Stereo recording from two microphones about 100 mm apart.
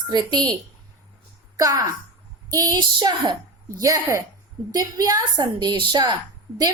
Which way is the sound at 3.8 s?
30° right (ahead or behind).